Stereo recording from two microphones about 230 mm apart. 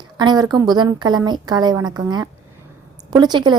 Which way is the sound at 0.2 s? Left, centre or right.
Centre.